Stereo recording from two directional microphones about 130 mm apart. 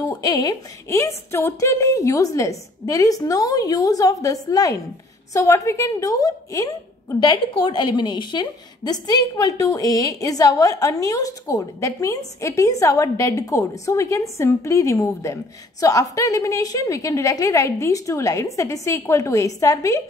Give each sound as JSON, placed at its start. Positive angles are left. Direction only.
{"t": 0.2, "sound": "a woman's voice", "side_deg": 30}
{"t": 7.2, "sound": "a woman's voice", "side_deg": 35}